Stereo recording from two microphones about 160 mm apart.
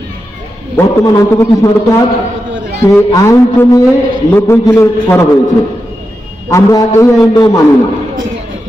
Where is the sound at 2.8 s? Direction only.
15° left (ahead or behind).